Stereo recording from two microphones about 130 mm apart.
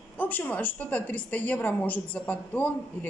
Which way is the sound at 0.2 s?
15° left (ahead or behind).